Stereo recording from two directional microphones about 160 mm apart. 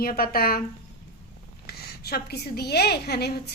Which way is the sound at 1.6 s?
90° left.